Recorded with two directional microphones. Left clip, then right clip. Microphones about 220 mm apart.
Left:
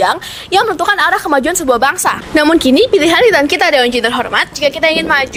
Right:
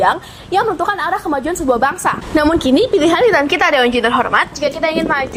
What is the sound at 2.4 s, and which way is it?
A woman's voice, 35° left (ahead or behind).